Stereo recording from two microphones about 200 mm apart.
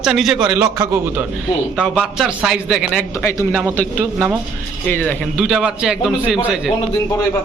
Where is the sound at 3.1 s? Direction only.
15° left (ahead or behind).